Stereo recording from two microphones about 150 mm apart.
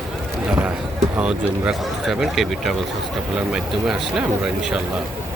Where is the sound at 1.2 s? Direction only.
5° right (ahead or behind).